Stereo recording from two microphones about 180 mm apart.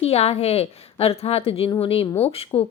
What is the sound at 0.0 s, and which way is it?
Speech, 35° left (ahead or behind).